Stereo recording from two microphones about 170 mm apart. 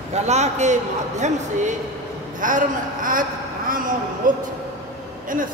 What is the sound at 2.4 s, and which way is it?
A man's voice, 50° right (ahead or behind).